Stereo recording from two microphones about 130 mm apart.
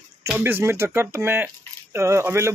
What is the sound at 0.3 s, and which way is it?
Speech, 15° right (ahead or behind).